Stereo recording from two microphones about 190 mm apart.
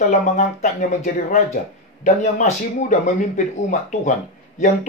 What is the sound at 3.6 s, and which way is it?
Speech, 40° left (ahead or behind).